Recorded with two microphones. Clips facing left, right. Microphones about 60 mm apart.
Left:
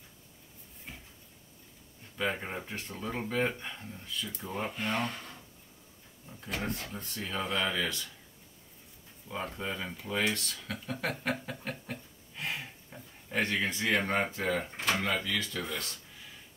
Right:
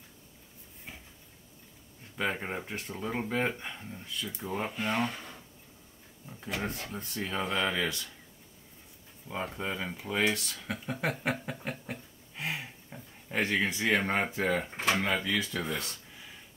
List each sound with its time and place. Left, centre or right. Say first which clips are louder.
0.9 s a sound: even; centre
2.1 s speech: right 1 dB; centre
6.4 s speech: right 1 dB; centre
9.3 s speech: right 2 dB; centre